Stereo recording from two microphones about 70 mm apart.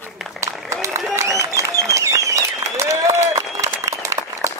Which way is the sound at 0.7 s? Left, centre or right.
Right.